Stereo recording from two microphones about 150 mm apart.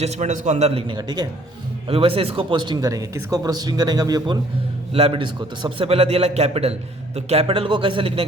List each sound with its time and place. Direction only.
0.0 s a man's voice: 50° right (ahead or behind); by 1.3 s 25° right (ahead or behind)
1.9 s speech: 40° right (ahead or behind)
4.9 s a man's voice: 40° right (ahead or behind)